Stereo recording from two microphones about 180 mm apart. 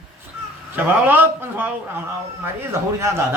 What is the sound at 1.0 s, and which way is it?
Speech, 10° right (ahead or behind).